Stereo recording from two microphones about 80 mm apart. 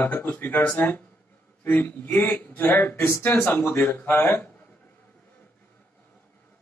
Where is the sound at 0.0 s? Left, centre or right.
Left.